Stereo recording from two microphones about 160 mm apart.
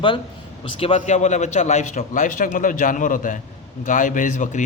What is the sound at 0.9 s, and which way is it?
A man's voice, 45° left (ahead or behind).